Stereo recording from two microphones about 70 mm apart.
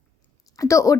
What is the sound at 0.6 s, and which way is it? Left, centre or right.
Speech, left.